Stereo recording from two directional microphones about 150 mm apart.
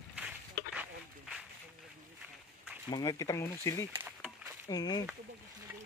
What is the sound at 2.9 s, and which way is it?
Speech, 25° left (ahead or behind).